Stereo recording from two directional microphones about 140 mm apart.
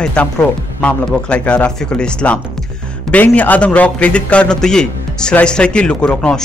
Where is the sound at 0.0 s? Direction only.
10° left (ahead or behind).